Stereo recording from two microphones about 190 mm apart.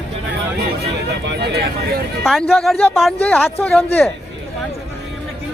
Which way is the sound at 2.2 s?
Centre (ahead or behind).